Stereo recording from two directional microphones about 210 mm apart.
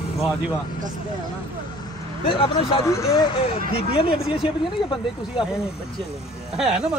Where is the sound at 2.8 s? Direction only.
15° left (ahead or behind).